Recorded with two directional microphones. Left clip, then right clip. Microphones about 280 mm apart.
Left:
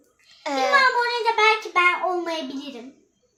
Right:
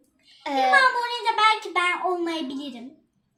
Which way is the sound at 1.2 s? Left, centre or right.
Centre.